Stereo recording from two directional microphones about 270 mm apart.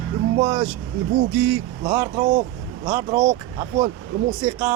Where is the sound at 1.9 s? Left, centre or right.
Centre.